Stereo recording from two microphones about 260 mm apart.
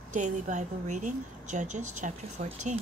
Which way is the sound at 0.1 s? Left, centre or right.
Right.